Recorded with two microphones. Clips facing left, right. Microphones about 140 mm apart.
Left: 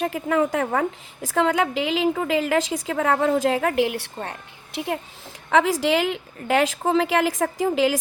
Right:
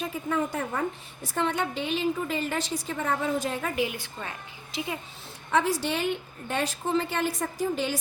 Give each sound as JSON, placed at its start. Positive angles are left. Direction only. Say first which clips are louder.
{"t": 0.0, "sound": "a woman's voice", "louder": "left 7 dB", "side_deg": 90}
{"t": 4.2, "sound": "a woman's voice", "louder": "left 5 dB", "side_deg": 65}
{"t": 5.5, "sound": "a woman's voice", "louder": "left 6 dB", "side_deg": 90}